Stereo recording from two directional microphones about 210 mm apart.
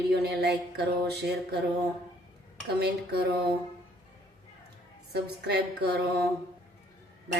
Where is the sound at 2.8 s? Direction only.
50° right (ahead or behind).